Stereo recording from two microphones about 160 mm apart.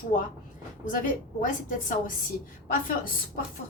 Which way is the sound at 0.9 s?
55° left (ahead or behind).